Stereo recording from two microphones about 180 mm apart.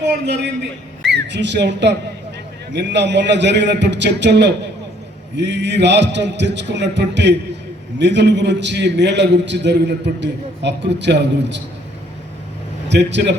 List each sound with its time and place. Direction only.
0.0 s a man's voice: 70° right (ahead or behind)
12.9 s a man's voice: 75° right (ahead or behind)